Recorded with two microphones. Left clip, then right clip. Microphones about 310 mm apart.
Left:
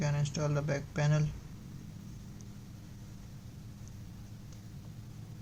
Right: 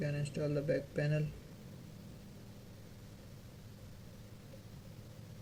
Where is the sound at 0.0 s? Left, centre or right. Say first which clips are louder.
Left 3 dB; left.